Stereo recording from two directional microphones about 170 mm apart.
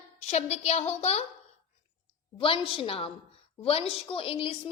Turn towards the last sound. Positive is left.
turn(degrees=35)  # may be behind; listen again after turning